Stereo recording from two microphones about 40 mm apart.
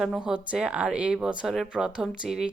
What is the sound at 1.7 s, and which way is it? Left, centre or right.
Speech, centre.